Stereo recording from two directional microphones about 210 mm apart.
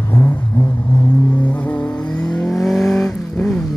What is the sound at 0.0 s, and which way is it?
Vehicle, 10° left (ahead or behind).